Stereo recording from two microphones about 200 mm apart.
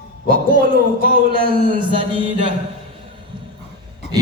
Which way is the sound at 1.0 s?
50° right (ahead or behind).